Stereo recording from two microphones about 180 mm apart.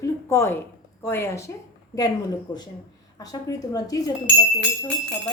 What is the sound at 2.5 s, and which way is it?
Speech, 25° left (ahead or behind).